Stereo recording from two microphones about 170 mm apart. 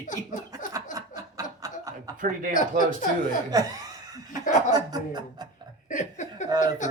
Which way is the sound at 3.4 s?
20° right (ahead or behind).